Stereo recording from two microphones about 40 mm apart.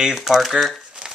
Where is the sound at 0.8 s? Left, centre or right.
Right.